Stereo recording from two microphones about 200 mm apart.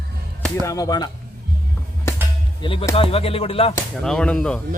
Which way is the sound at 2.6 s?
25° left (ahead or behind).